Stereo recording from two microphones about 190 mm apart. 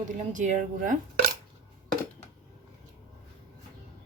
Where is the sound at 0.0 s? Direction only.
40° right (ahead or behind).